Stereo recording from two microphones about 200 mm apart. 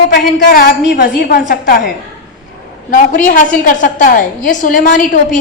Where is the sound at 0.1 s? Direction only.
45° left (ahead or behind).